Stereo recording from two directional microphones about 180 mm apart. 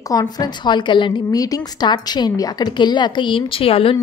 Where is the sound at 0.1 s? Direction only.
20° left (ahead or behind).